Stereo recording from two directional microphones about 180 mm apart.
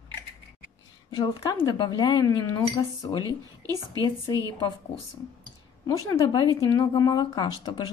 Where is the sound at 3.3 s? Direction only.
20° right (ahead or behind).